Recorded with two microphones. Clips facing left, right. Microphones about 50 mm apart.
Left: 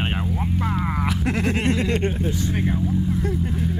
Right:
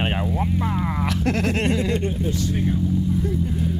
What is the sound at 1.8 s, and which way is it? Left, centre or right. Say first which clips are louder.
Speech: left 1 dB; left.